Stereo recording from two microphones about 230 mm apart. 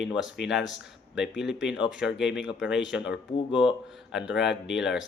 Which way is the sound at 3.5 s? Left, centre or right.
Left.